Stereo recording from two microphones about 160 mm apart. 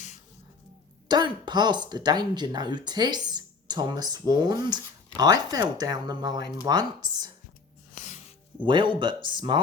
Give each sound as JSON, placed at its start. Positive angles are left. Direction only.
{"t": 1.0, "sound": "speech", "side_deg": -25}
{"t": 7.9, "sound": "music", "side_deg": 50}
{"t": 8.6, "sound": "speech", "side_deg": -30}